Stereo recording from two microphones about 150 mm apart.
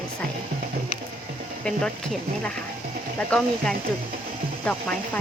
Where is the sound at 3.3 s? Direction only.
5° left (ahead or behind).